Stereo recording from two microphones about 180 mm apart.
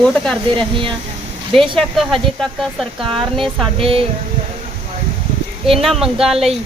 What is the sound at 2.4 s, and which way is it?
Speech, centre (ahead or behind).